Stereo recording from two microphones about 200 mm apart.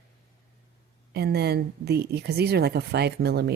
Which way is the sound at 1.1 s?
55° right (ahead or behind).